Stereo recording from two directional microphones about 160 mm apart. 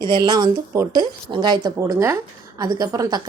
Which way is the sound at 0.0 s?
30° right (ahead or behind).